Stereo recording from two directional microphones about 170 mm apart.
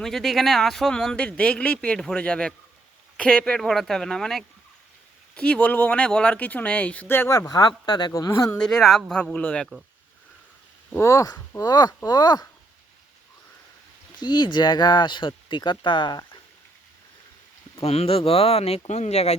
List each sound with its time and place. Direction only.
0.0 s speech: centre (ahead or behind)
8.5 s speech: 5° left (ahead or behind)
10.9 s speech: 15° left (ahead or behind)
14.2 s speech: 25° left (ahead or behind)
17.7 s speech: 35° left (ahead or behind)